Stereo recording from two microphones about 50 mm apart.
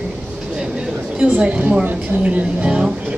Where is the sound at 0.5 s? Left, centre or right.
Centre.